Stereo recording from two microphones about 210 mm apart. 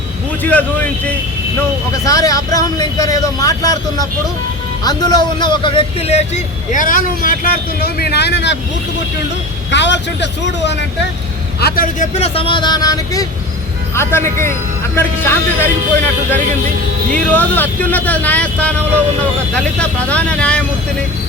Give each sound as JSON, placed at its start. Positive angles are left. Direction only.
{"t": 0.4, "sound": "speech", "side_deg": 5}
{"t": 7.9, "sound": "speech", "side_deg": 50}
{"t": 9.7, "sound": "speech", "side_deg": 55}
{"t": 11.6, "sound": "speech", "side_deg": 40}
{"t": 14.3, "sound": "a man's voice", "side_deg": -40}
{"t": 14.9, "sound": "speech", "side_deg": 10}
{"t": 17.2, "sound": "speech", "side_deg": 5}